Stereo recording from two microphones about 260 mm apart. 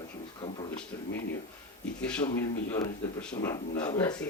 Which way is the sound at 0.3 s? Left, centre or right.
Centre.